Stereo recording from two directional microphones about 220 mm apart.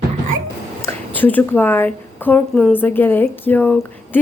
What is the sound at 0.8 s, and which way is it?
Speech, 10° left (ahead or behind).